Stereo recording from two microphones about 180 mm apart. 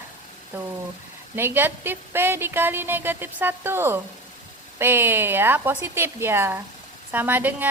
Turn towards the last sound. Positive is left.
turn(degrees=-10)  # may be behind; listen again after turning